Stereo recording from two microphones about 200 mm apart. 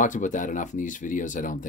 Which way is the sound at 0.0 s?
40° left (ahead or behind).